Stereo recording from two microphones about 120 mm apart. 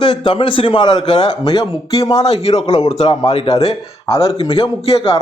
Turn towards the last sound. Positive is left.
turn(degrees=55)  # may be behind; listen again after turning